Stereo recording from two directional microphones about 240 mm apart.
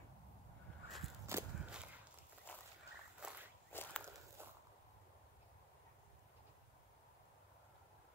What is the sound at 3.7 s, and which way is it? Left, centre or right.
Walk, centre.